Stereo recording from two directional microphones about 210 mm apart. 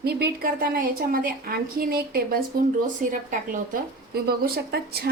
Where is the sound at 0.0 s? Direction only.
50° right (ahead or behind).